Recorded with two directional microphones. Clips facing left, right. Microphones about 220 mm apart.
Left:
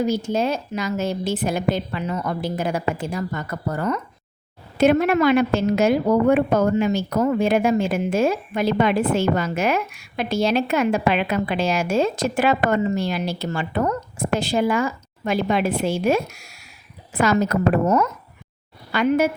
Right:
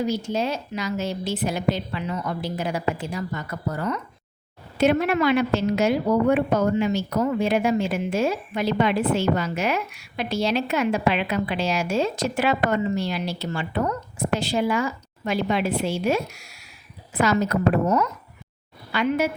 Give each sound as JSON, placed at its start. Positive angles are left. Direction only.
{"t": 0.0, "sound": "a woman's voice", "side_deg": 50}